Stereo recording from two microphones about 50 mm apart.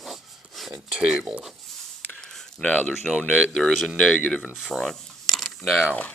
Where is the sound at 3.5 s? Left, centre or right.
Centre.